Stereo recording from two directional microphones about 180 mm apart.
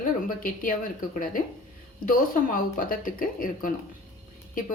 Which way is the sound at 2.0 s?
50° left (ahead or behind).